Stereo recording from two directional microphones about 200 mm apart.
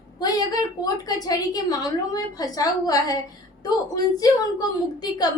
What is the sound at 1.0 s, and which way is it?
A woman's voice, 20° left (ahead or behind).